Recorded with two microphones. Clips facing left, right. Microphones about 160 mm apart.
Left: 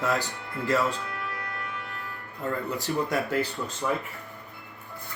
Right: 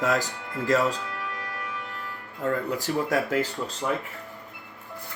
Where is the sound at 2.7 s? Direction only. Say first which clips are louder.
Right 2 dB; 45° right (ahead or behind).